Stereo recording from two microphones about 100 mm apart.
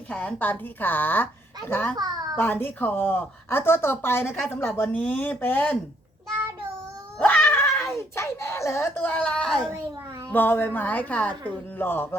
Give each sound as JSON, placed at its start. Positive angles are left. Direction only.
{"t": 0.1, "sound": "speech", "side_deg": 15}
{"t": 2.0, "sound": "a sound", "side_deg": -40}
{"t": 2.3, "sound": "a woman's voice", "side_deg": 20}
{"t": 7.2, "sound": "cat", "side_deg": 15}
{"t": 7.9, "sound": "speech", "side_deg": 25}
{"t": 10.3, "sound": "a woman's voice", "side_deg": 20}